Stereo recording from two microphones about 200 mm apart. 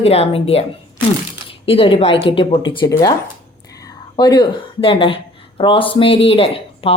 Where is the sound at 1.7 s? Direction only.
25° left (ahead or behind).